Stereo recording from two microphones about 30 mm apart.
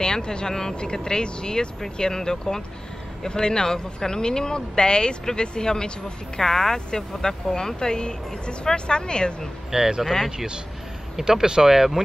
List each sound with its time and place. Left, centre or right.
0.0 s speech: left
9.7 s speech: right